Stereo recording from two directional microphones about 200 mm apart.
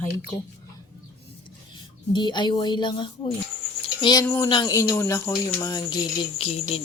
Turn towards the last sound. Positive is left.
turn(degrees=30)  # may be behind; listen again after turning